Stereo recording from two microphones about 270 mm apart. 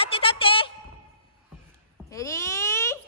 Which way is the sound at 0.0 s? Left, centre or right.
Centre.